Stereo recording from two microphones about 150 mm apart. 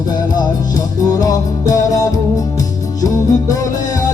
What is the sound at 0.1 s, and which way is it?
Music, 25° left (ahead or behind).